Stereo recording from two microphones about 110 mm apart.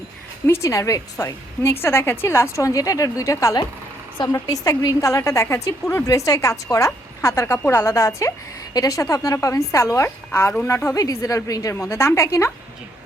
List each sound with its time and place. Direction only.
0.4 s a woman's voice: 25° left (ahead or behind)
10.9 s a woman's voice: 30° left (ahead or behind)